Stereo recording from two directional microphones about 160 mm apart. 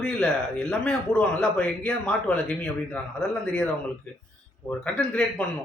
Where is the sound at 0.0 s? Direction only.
5° left (ahead or behind).